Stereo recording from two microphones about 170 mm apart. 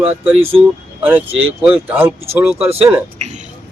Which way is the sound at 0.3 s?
35° right (ahead or behind).